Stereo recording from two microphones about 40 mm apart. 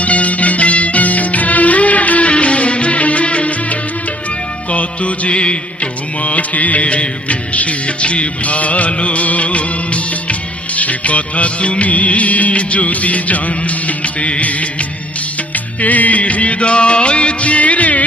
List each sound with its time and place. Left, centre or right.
0.0 s music: left
10.8 s music of bollywood: left
15.5 s music: left